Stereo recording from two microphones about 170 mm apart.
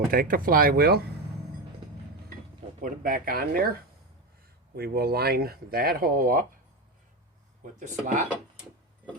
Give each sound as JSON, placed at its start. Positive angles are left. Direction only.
{"t": 0.1, "sound": "speech", "side_deg": -55}
{"t": 2.8, "sound": "speech", "side_deg": -55}
{"t": 4.7, "sound": "speech", "side_deg": -65}
{"t": 7.6, "sound": "speech", "side_deg": -45}